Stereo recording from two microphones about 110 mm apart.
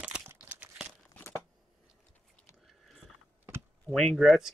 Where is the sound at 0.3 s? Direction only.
15° right (ahead or behind).